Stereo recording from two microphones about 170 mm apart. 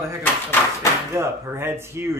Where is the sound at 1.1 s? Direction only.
15° right (ahead or behind).